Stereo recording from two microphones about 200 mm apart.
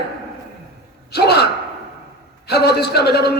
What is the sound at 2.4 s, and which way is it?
Speech, 55° left (ahead or behind).